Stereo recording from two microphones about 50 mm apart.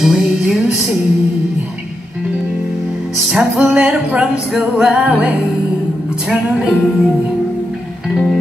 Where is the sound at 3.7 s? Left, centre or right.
Right.